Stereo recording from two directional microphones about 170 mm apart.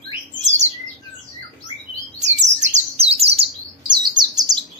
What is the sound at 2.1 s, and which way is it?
Bird, 40° right (ahead or behind).